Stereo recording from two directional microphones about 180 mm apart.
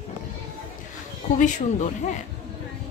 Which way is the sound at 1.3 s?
45° left (ahead or behind).